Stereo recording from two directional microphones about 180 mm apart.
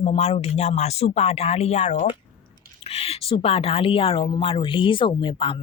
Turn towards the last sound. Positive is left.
turn(degrees=25)  # may be behind; listen again after turning